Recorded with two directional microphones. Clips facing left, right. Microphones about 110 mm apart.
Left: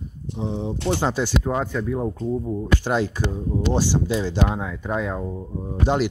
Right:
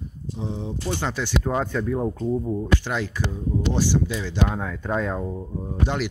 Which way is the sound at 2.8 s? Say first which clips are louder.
Left 5 dB; 35° left (ahead or behind).